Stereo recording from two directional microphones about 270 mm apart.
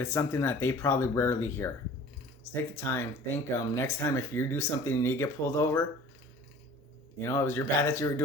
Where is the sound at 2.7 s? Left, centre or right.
Centre.